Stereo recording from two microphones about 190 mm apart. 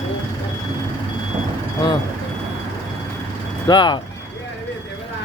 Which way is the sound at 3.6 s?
25° left (ahead or behind).